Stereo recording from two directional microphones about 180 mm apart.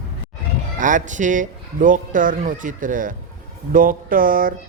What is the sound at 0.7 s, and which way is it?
Speech, 45° right (ahead or behind).